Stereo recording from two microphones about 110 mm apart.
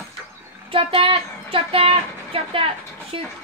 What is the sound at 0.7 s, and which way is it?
Speech, 55° right (ahead or behind).